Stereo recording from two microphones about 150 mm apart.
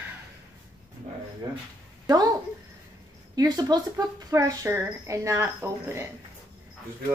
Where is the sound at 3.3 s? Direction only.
25° right (ahead or behind).